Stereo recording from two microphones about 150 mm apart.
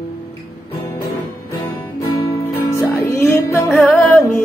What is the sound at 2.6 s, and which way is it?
Music, 20° left (ahead or behind).